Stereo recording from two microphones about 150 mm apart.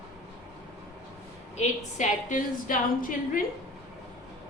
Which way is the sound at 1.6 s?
55° left (ahead or behind).